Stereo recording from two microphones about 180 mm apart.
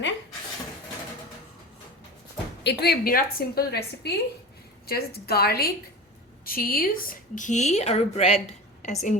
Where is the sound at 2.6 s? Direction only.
65° left (ahead or behind).